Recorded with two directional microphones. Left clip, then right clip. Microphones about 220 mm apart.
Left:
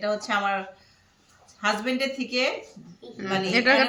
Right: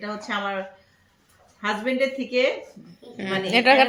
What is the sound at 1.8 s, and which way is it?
Speech, 45° left (ahead or behind).